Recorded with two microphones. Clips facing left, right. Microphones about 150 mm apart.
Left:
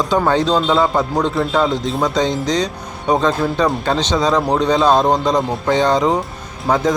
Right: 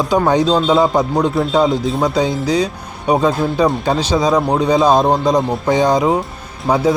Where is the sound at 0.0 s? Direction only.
10° right (ahead or behind).